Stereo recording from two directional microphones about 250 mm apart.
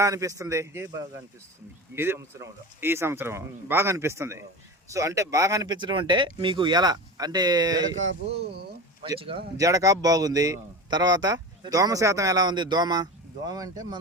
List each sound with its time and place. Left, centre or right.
0.0 s speech: centre
2.0 s speech: centre
7.9 s speech: right
9.0 s speech: centre